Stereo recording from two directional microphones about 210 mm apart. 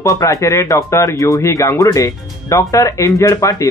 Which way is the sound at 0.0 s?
15° left (ahead or behind).